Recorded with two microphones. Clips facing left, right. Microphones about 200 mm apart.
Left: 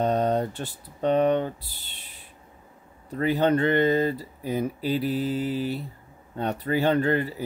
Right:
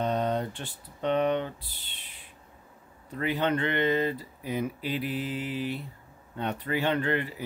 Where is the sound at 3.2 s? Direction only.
40° left (ahead or behind).